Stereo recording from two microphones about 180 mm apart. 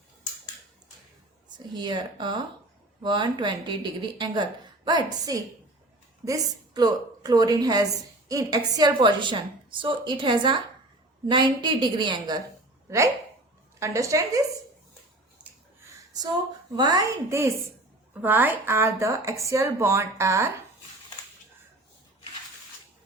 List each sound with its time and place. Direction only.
1.5 s a woman's voice: 25° right (ahead or behind)
13.7 s speech: 15° right (ahead or behind)
16.7 s a woman's voice: 25° right (ahead or behind)